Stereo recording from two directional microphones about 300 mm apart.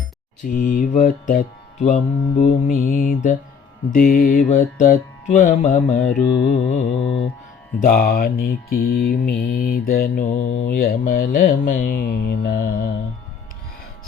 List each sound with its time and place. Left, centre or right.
0.4 s speech: left
7.0 s mantra: left
7.8 s speech: left
9.8 s mantra: left
10.8 s speech: left